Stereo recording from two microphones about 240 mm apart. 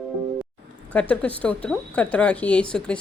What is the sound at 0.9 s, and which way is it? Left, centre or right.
Speech, centre.